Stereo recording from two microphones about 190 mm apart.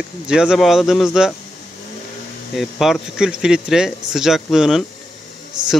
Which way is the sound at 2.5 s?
Centre (ahead or behind).